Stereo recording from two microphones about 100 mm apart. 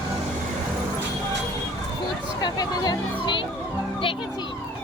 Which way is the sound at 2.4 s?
45° left (ahead or behind).